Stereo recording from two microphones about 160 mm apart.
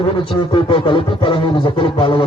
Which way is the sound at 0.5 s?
35° left (ahead or behind).